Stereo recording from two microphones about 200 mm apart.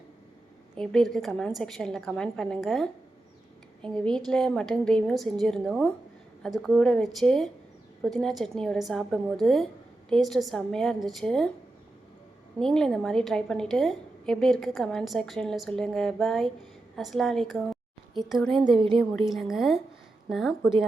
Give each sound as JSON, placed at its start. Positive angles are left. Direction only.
{"t": 0.8, "sound": "a woman's voice", "side_deg": 0}
{"t": 12.5, "sound": "a woman's voice", "side_deg": 5}
{"t": 18.7, "sound": "a woman's voice", "side_deg": -25}
{"t": 19.1, "sound": "a woman's voice", "side_deg": 0}